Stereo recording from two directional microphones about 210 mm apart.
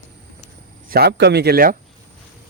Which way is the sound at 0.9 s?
50° right (ahead or behind).